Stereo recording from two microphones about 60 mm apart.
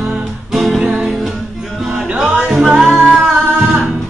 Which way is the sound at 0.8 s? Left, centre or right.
Centre.